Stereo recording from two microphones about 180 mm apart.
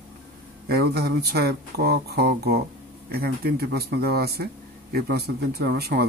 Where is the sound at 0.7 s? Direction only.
60° right (ahead or behind).